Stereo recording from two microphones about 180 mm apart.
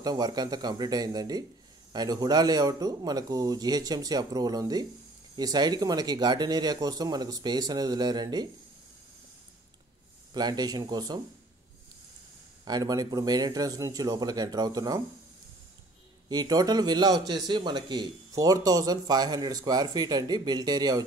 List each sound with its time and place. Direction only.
0.0 s speech: 20° right (ahead or behind)
10.3 s speech: 20° right (ahead or behind)
12.6 s speech: 20° right (ahead or behind)
16.3 s speech: 20° right (ahead or behind)